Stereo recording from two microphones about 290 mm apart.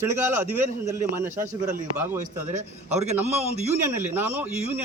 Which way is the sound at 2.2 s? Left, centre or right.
Right.